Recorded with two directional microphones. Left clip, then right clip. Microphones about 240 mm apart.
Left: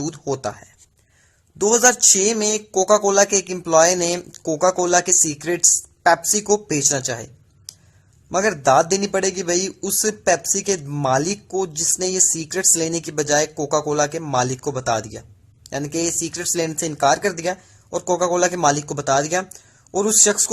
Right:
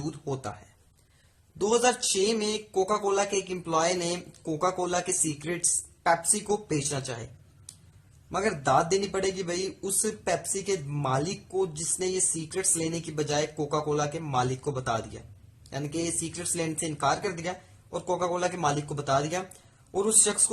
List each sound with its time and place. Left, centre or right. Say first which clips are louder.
1.5 s speech: left 8 dB; left
8.3 s speech: left 9 dB; left